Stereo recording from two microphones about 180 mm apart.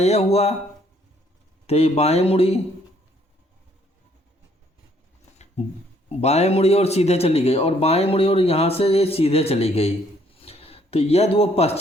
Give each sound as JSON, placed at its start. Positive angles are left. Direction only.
{"t": 0.0, "sound": "a man's voice", "side_deg": 35}
{"t": 1.6, "sound": "a man's voice", "side_deg": 35}
{"t": 6.1, "sound": "a man's voice", "side_deg": 35}